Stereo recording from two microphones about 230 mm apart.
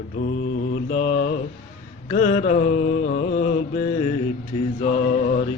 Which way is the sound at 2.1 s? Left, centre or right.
Left.